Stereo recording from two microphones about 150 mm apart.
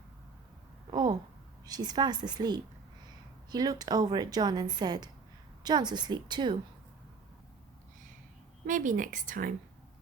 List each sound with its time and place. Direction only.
0.9 s a sound: 30° right (ahead or behind)
1.6 s a woman's voice: 25° right (ahead or behind)
8.6 s speech: 60° right (ahead or behind)